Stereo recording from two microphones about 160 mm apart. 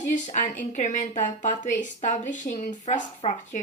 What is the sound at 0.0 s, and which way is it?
Speech, 50° left (ahead or behind).